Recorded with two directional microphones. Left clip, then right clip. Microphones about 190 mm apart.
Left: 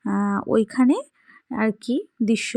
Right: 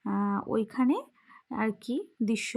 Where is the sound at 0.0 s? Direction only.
30° left (ahead or behind).